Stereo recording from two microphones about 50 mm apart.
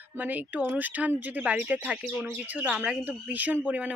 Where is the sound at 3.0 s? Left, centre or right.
Right.